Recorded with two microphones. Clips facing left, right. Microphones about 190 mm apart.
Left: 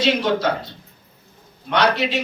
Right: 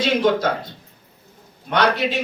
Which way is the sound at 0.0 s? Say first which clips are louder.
Right 1 dB; 50° right (ahead or behind).